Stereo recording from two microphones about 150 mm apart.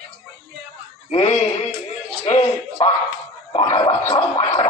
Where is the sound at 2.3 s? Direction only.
30° left (ahead or behind).